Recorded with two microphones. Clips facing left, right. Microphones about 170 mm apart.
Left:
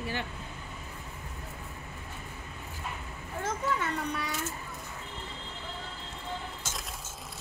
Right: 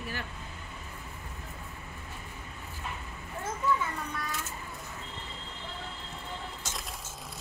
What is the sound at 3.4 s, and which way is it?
Children playing, 75° left (ahead or behind).